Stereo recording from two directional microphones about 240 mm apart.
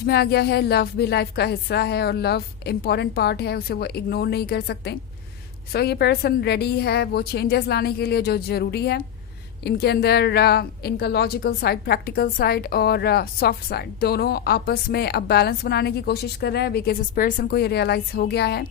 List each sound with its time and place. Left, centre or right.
0.0 s a woman's voice: left